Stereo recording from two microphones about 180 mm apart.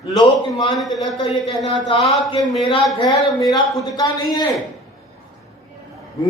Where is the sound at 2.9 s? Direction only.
20° left (ahead or behind).